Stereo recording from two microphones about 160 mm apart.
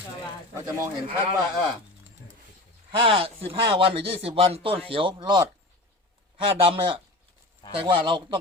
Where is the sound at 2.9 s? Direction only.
35° right (ahead or behind).